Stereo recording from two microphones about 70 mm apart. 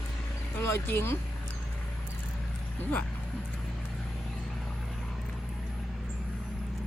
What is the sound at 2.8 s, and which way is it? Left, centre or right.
Speech, left.